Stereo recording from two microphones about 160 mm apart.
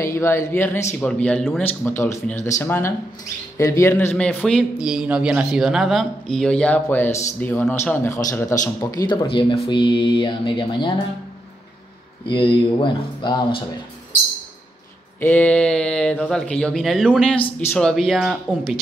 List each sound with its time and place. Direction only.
0.0 s speech: 15° left (ahead or behind)
2.3 s speech: 50° left (ahead or behind)
2.6 s a man's voice: 15° left (ahead or behind); by 10.9 s 30° left (ahead or behind)
12.3 s a man's voice: 30° left (ahead or behind)
15.1 s a man's voice: 10° left (ahead or behind)